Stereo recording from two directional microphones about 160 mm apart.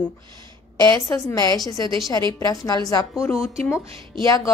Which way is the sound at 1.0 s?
20° left (ahead or behind).